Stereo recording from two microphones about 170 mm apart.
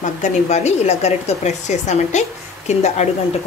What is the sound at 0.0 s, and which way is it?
Speech, 45° left (ahead or behind).